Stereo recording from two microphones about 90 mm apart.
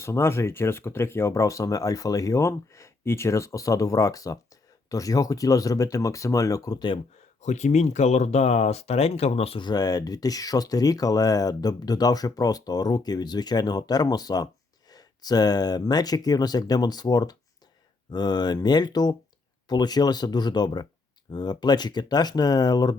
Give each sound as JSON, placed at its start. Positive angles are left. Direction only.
{"t": 0.0, "sound": "speech", "side_deg": 30}
{"t": 9.0, "sound": "speech", "side_deg": 90}
{"t": 9.6, "sound": "speech", "side_deg": 50}